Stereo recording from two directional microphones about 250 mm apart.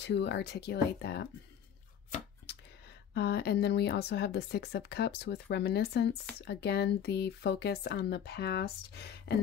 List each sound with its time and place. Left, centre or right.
0.0 s speech: left
3.2 s speech: left